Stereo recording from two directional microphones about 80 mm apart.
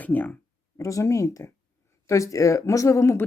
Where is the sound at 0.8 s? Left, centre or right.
Left.